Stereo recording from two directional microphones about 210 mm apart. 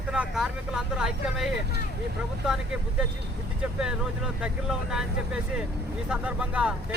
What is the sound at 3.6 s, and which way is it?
Speech, 5° right (ahead or behind).